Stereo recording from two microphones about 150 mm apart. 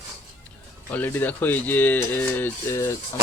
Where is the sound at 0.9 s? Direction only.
10° left (ahead or behind).